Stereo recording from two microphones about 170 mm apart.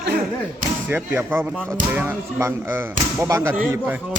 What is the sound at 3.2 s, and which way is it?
Speech, 20° right (ahead or behind).